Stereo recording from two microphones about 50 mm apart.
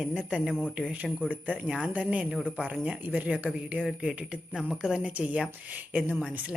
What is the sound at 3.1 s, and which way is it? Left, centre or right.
A woman's voice, right.